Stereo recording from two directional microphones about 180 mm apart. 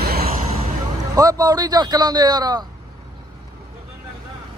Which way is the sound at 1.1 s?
20° right (ahead or behind).